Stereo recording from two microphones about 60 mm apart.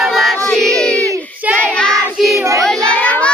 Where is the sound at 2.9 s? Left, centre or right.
Left.